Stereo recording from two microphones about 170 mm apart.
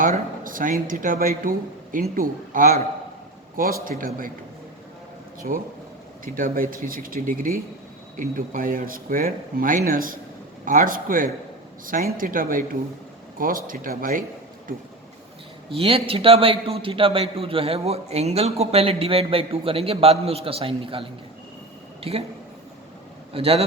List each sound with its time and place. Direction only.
0.4 s speech: 55° right (ahead or behind)
3.8 s speech: 55° right (ahead or behind)
5.5 s speech: 55° right (ahead or behind)
15.7 s a man's voice: 35° right (ahead or behind)
23.3 s a man's voice: 35° right (ahead or behind)